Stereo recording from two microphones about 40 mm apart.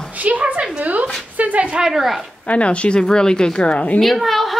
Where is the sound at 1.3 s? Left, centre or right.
Right.